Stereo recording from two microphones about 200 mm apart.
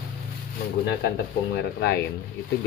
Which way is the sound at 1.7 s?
55° left (ahead or behind).